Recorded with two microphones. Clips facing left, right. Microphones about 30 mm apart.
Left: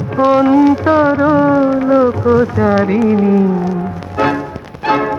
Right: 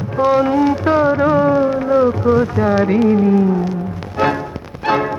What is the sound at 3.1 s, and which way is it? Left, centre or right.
Music, centre.